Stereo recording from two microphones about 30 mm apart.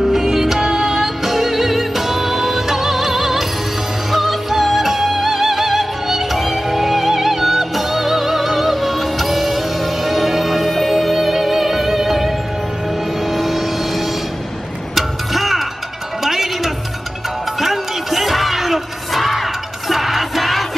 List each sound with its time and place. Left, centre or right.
0.1 s music: centre
13.3 s vehicle: centre
15.0 s music: centre